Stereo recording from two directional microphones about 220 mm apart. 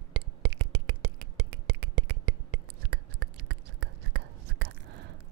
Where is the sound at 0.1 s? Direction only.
50° right (ahead or behind).